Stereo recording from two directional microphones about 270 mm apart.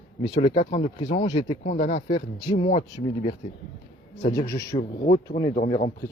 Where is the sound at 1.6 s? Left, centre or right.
Left.